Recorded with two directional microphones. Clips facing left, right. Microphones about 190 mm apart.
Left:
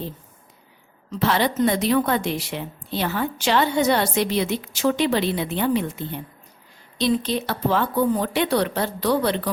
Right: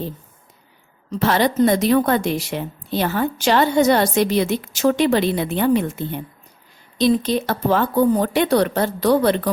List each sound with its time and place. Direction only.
1.1 s a woman's voice: 45° right (ahead or behind)